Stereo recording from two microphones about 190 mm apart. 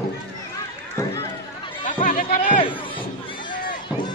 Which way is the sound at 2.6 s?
25° left (ahead or behind).